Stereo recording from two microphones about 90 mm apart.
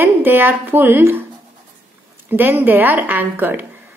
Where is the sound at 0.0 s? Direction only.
25° right (ahead or behind).